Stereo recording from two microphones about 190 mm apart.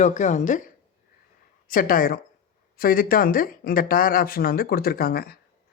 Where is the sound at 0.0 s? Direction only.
40° left (ahead or behind).